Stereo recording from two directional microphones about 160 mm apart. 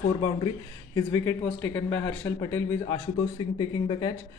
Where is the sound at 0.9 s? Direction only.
20° left (ahead or behind).